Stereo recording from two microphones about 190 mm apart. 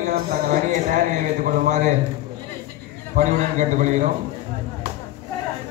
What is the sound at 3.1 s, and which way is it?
Speech, 40° right (ahead or behind).